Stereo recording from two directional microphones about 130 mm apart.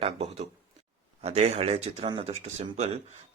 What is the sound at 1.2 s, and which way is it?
Speech, 55° right (ahead or behind).